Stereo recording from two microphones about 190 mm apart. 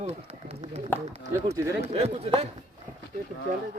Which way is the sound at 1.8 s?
35° right (ahead or behind).